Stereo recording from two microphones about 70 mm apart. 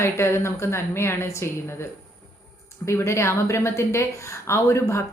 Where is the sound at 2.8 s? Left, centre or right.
Left.